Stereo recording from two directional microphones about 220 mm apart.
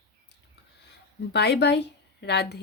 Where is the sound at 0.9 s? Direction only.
50° left (ahead or behind).